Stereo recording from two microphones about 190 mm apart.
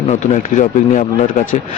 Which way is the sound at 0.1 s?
40° left (ahead or behind).